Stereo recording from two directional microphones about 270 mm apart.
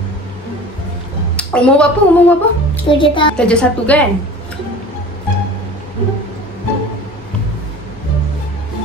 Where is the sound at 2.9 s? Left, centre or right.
Centre.